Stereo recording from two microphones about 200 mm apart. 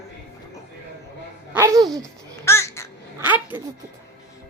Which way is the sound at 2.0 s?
15° left (ahead or behind).